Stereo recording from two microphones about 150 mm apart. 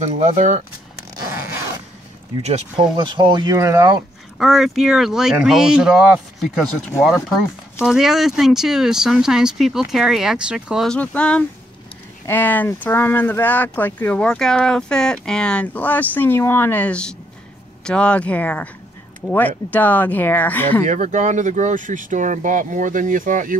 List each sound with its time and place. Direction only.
0.0 s speech: 55° right (ahead or behind)
3.0 s speech: 30° right (ahead or behind)
4.4 s speech: centre (ahead or behind)
7.8 s speech: 5° right (ahead or behind)
11.0 s speech: 10° left (ahead or behind)
20.8 s speech: 55° right (ahead or behind)